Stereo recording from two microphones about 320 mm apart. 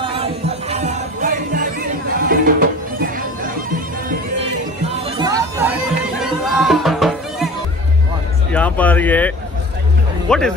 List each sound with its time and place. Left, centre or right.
0.0 s music: centre
5.1 s music: centre
8.5 s speech: centre